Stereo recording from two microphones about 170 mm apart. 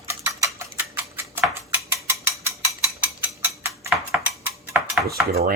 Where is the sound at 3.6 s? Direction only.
15° right (ahead or behind).